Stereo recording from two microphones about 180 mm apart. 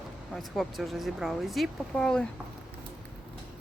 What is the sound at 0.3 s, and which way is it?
Speech, centre (ahead or behind).